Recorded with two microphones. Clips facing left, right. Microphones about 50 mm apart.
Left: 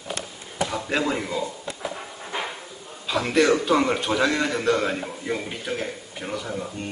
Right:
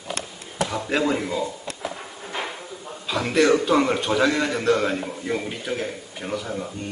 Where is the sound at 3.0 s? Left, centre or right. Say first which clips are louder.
Right 1 dB; centre.